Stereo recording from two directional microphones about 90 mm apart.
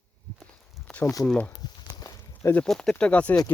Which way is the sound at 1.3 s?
15° left (ahead or behind).